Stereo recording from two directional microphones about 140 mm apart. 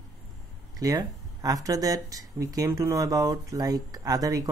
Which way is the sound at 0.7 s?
25° right (ahead or behind).